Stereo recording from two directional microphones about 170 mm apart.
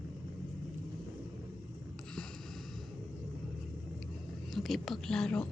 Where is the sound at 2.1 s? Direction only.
5° left (ahead or behind).